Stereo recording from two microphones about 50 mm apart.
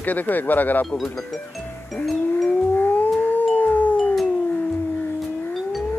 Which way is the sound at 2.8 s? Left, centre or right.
Left.